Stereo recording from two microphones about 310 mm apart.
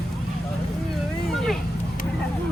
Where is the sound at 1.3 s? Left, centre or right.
Centre.